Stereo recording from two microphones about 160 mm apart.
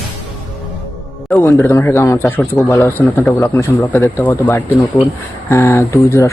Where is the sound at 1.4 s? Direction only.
15° left (ahead or behind).